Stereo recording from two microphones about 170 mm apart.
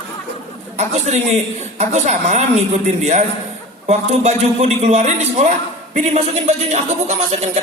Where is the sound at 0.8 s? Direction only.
40° right (ahead or behind).